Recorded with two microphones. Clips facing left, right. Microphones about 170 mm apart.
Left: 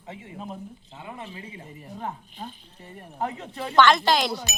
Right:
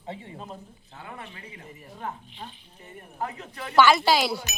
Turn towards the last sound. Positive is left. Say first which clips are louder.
# even
turn(degrees=-5)  # may be behind; listen again after turning